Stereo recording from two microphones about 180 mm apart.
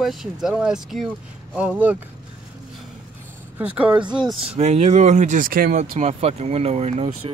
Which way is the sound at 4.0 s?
25° right (ahead or behind).